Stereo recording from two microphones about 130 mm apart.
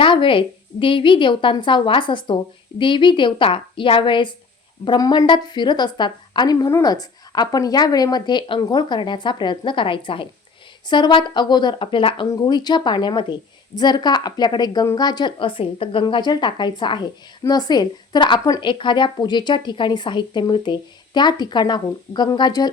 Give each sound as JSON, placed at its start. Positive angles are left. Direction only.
{"t": 0.0, "sound": "a woman's voice", "side_deg": 40}